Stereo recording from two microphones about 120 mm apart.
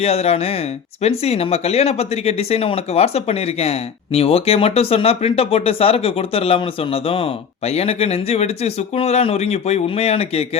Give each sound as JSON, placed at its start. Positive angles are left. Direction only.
{"t": 0.0, "sound": "speech", "side_deg": 60}